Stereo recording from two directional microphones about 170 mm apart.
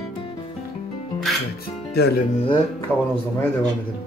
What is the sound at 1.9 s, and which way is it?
Speech, 75° left (ahead or behind).